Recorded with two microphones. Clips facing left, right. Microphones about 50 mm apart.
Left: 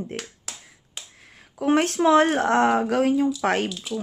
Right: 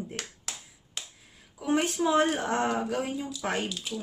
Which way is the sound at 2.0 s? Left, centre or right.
Left.